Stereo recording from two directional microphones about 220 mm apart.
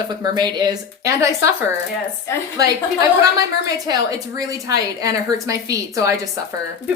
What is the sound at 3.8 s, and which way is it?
A woman's voice, 15° right (ahead or behind).